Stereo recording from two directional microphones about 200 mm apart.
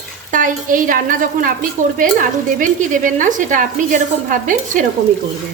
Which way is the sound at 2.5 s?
40° right (ahead or behind).